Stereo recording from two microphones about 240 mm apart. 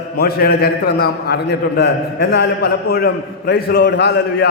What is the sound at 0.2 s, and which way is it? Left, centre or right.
A man's voice, left.